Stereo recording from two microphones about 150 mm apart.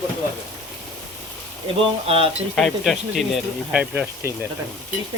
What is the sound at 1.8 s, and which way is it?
Speech, 40° right (ahead or behind).